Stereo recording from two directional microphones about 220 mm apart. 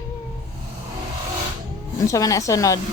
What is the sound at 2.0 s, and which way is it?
Speech, 15° left (ahead or behind).